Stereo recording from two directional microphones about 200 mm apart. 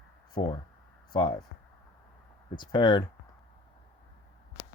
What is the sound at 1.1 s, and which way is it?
Speech, 25° left (ahead or behind).